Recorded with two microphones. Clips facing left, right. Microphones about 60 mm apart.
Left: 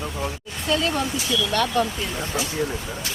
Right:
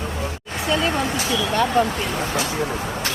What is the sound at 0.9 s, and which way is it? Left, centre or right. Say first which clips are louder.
Speech: right 2 dB; right.